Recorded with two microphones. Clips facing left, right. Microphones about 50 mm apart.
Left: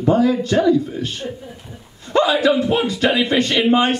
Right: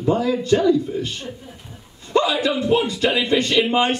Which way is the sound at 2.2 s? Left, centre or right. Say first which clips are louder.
Left 4 dB; left.